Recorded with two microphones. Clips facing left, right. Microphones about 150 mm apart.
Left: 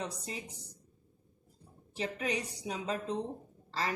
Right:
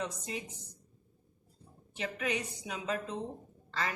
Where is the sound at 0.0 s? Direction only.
35° left (ahead or behind).